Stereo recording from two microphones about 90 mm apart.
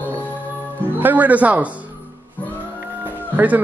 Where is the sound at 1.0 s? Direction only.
20° right (ahead or behind).